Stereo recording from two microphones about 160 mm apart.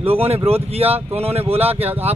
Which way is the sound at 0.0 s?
40° right (ahead or behind).